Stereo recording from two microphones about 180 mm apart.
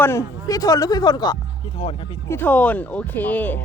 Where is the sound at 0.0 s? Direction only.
15° left (ahead or behind).